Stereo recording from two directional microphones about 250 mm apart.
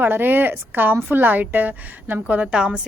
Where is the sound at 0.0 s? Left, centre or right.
Centre.